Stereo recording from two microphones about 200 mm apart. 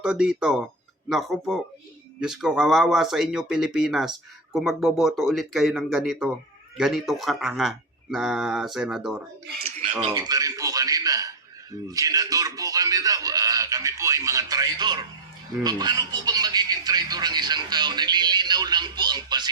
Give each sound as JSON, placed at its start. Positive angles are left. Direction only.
{"t": 0.0, "sound": "speech", "side_deg": -5}
{"t": 10.1, "sound": "a man's voice", "side_deg": -20}